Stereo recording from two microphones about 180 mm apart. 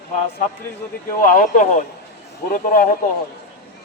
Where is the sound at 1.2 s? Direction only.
45° left (ahead or behind).